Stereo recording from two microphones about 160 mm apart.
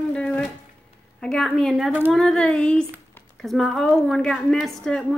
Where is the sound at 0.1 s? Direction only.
10° left (ahead or behind).